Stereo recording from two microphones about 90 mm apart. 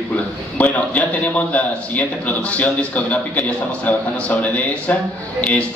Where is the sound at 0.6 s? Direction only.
15° left (ahead or behind).